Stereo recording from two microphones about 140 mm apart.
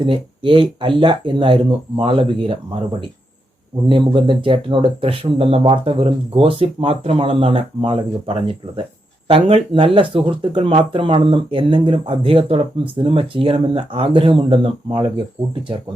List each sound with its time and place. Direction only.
0.0 s speech: 35° right (ahead or behind)
3.8 s speech: 35° right (ahead or behind)